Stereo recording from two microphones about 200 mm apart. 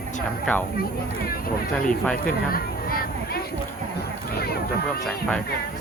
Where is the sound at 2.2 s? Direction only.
45° left (ahead or behind).